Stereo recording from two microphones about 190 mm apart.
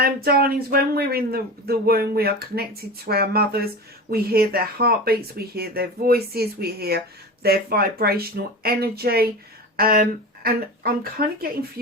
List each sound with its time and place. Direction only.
0.0 s speech: 55° right (ahead or behind)